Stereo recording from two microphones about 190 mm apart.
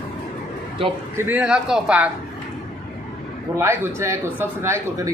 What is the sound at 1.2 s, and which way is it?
Speech, 10° right (ahead or behind).